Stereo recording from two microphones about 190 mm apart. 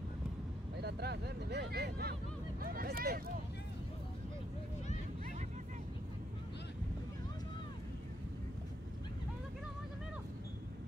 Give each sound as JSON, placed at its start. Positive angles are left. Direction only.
{"t": 0.7, "sound": "speech", "side_deg": -60}